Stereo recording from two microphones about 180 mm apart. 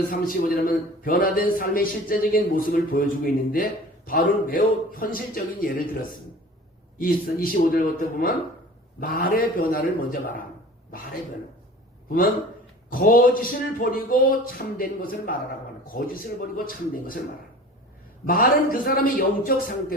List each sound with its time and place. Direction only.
0.1 s a man's voice: 50° left (ahead or behind)
12.0 s a man's voice: 55° left (ahead or behind)
18.3 s a man's voice: 50° left (ahead or behind)